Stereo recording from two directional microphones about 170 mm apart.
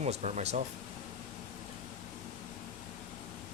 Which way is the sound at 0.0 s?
40° right (ahead or behind).